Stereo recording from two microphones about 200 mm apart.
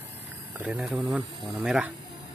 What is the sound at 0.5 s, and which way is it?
Speech, 5° right (ahead or behind).